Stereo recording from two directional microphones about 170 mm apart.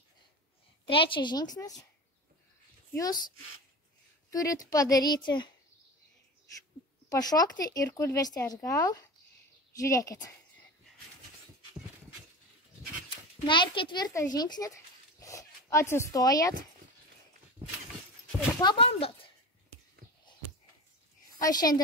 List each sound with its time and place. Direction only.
0.8 s speech: 30° left (ahead or behind)
3.0 s speech: 25° left (ahead or behind)
4.3 s a woman's voice: 20° left (ahead or behind)
7.1 s speech: 20° left (ahead or behind)
13.5 s speech: 30° left (ahead or behind)
15.1 s a sound: 20° left (ahead or behind)
18.6 s speech: 30° left (ahead or behind)
21.4 s speech: 25° left (ahead or behind)